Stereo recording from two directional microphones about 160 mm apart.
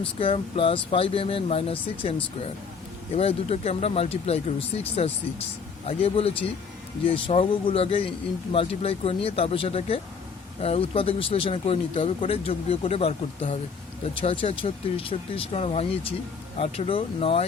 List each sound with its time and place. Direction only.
0.0 s speech: 35° left (ahead or behind)